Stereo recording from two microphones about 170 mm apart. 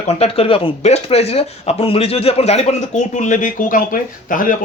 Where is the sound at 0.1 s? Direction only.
35° left (ahead or behind).